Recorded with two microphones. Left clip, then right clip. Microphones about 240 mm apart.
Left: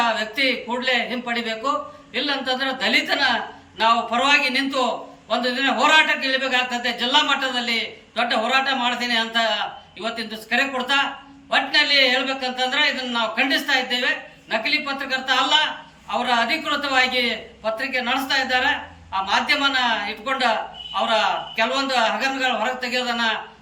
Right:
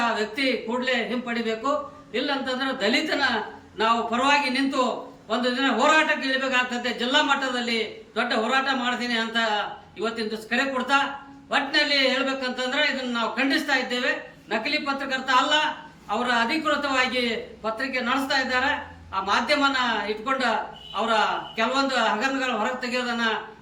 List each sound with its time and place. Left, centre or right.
0.0 s a man's voice: centre